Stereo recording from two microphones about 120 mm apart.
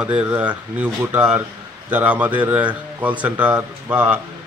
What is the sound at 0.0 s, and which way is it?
A man's voice, 10° right (ahead or behind).